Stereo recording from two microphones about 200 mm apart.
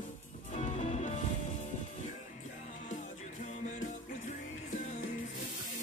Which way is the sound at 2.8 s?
40° left (ahead or behind).